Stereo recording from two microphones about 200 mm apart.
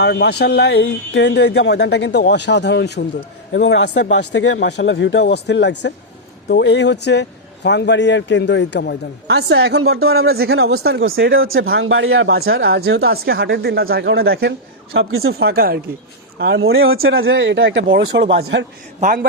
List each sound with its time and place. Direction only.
0.0 s speech: 55° left (ahead or behind)
9.2 s speech: 55° right (ahead or behind)
11.3 s speech: 85° right
12.5 s speech: 65° right (ahead or behind)
13.1 s speech: 50° right (ahead or behind)
14.9 s speech: 90° right
15.3 s speech: 50° right (ahead or behind)
16.7 s speech: 90° right; by 18.7 s 65° right (ahead or behind)